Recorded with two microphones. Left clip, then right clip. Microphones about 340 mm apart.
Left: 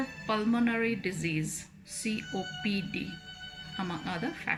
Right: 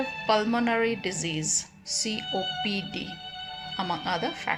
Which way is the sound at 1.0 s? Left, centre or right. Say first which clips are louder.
Right 3 dB; right.